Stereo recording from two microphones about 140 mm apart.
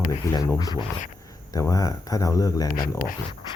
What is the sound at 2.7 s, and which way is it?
Speech, 90° left.